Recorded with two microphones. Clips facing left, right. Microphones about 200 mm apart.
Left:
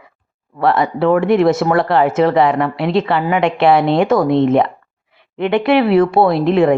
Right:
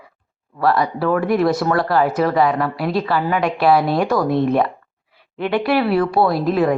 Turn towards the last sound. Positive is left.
turn(degrees=25)  # may be behind; listen again after turning